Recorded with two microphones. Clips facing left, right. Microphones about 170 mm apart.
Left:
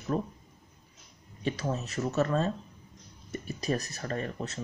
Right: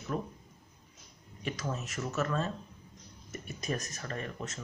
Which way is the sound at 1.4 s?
35° left (ahead or behind).